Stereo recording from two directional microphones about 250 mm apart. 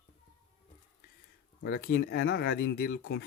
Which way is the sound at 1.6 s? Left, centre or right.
Left.